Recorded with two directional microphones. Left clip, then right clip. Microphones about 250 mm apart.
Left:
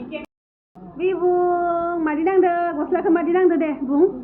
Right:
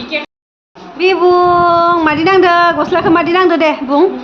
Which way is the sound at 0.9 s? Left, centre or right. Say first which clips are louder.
Right 10 dB; centre.